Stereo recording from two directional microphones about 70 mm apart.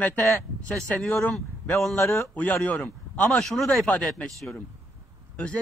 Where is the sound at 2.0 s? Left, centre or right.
Left.